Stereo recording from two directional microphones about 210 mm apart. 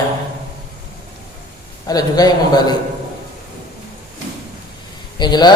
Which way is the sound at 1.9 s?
20° left (ahead or behind).